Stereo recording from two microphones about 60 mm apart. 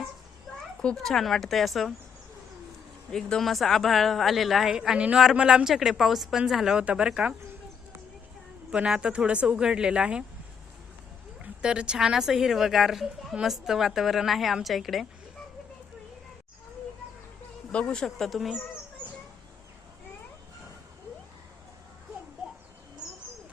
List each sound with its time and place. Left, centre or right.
1.0 s a woman's voice: centre
3.1 s a woman's voice: centre
4.7 s a woman's voice: centre
8.7 s speech: centre
11.6 s a woman's voice: centre
17.7 s speech: centre
18.3 s a woman's voice: centre